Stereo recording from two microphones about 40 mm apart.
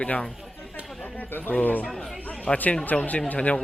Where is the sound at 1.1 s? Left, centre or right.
Left.